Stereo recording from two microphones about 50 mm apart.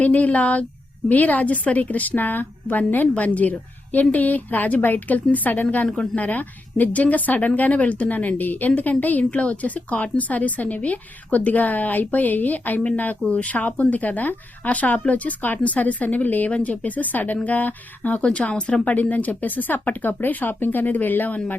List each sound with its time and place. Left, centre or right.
0.0 s speech: left
18.2 s speech: left